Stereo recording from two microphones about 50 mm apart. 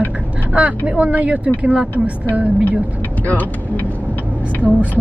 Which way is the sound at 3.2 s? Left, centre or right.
Left.